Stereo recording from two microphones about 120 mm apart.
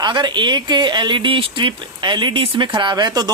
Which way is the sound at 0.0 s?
40° right (ahead or behind).